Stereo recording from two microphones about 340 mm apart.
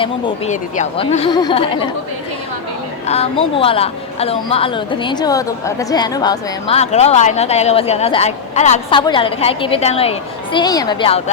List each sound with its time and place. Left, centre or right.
0.0 s a woman's voice: centre
3.1 s a woman's voice: centre